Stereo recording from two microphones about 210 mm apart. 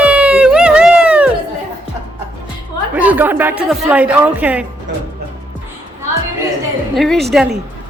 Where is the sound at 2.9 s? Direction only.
5° right (ahead or behind).